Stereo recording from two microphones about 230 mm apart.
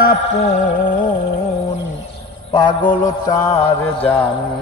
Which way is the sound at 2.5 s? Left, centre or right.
Left.